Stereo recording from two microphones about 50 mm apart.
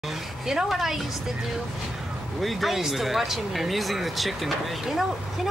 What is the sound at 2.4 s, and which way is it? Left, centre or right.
Speech, centre.